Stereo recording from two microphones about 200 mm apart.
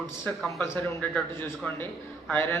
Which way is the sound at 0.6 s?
10° left (ahead or behind).